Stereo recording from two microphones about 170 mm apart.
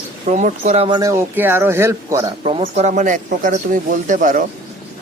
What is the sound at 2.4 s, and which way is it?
A man's voice, 35° right (ahead or behind).